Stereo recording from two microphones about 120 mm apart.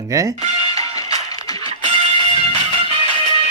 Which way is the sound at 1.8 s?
50° right (ahead or behind).